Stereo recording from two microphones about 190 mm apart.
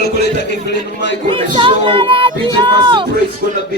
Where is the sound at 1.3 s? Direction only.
25° right (ahead or behind).